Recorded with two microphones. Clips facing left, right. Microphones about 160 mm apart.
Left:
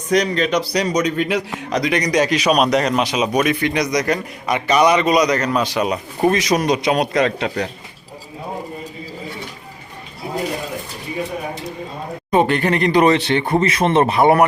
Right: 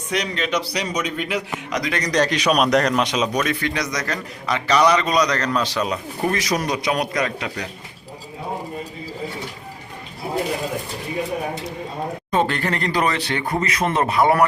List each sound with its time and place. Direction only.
0.1 s a man's voice: 40° left (ahead or behind)
1.8 s a man's voice: 15° left (ahead or behind)
12.3 s speech: 15° left (ahead or behind)